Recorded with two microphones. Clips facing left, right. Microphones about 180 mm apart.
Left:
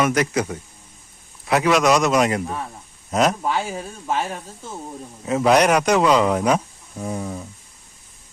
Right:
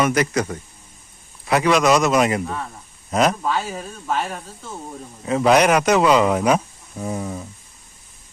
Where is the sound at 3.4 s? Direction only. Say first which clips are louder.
Even; 15° left (ahead or behind).